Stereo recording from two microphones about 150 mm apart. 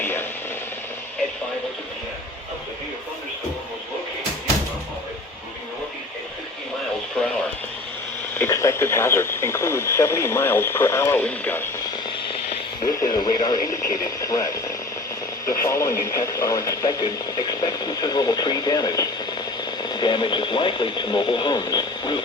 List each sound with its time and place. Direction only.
0.0 s radio: 15° left (ahead or behind)
8.4 s speech: 20° left (ahead or behind)
12.9 s speech: 25° left (ahead or behind)